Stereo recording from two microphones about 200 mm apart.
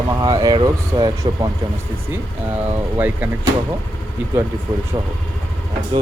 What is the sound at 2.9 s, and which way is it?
Speech, 10° right (ahead or behind).